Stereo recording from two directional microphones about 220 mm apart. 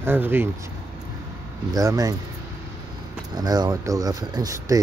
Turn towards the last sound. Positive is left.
turn(degrees=-15)  # may be behind; listen again after turning